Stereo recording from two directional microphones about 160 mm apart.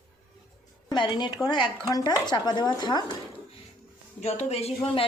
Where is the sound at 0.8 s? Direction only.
30° left (ahead or behind).